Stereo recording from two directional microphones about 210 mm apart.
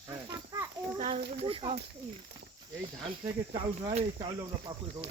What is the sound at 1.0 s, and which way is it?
Speech, 25° right (ahead or behind).